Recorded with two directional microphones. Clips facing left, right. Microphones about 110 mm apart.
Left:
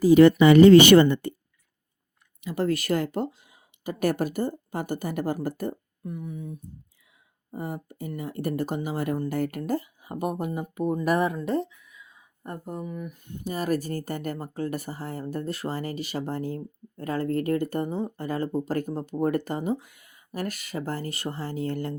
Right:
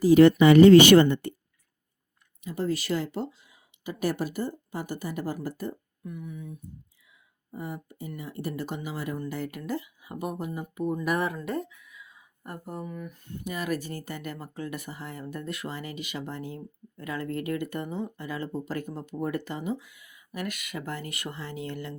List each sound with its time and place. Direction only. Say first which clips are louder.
2.4 s speech: left 3 dB; 80° left; by 5.7 s 55° left (ahead or behind)
5.7 s speech: left 4 dB; 35° left (ahead or behind)
7.5 s speech: left 3 dB; 50° left (ahead or behind)
10.9 s speech: left 5 dB; 35° left (ahead or behind)
11.2 s speech: left 4 dB; 20° left (ahead or behind)
13.4 s speech: left 4 dB; 35° left (ahead or behind)